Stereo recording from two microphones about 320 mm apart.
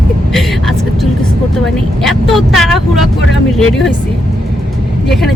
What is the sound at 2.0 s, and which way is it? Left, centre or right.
Speech, centre.